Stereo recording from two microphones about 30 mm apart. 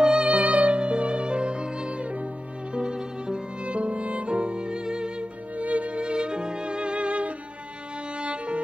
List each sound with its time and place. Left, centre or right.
0.0 s music: right
0.3 s music: right
2.0 s music: right
2.7 s music: right
3.6 s music: right
5.6 s music: right